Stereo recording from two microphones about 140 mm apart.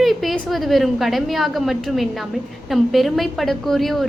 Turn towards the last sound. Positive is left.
turn(degrees=0)  # may be behind; listen again after turning